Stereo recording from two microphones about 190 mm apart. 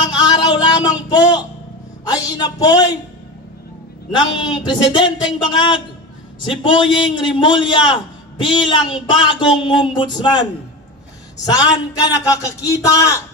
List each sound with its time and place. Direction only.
0.3 s a sound: 20° left (ahead or behind)
2.0 s speech: 20° left (ahead or behind)
4.4 s a man's voice: 25° left (ahead or behind)